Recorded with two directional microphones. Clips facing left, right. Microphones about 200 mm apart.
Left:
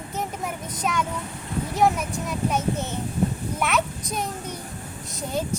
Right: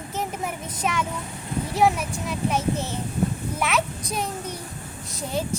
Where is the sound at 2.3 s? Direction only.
Centre (ahead or behind).